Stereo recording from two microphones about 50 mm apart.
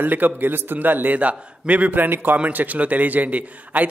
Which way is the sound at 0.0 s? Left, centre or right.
Right.